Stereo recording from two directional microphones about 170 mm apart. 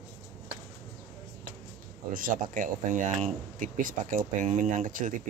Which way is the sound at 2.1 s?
55° right (ahead or behind).